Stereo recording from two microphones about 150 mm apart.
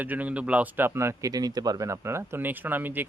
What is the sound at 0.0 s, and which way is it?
Speech, 10° right (ahead or behind).